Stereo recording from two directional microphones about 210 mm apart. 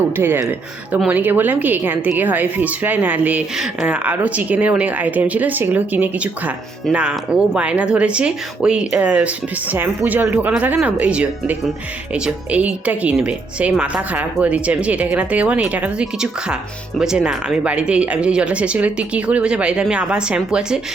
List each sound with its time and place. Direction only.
0.2 s speech: 10° right (ahead or behind)